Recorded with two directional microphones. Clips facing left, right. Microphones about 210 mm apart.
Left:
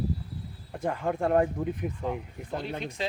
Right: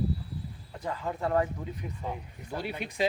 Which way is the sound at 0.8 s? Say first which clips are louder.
Left 4 dB; 55° left (ahead or behind).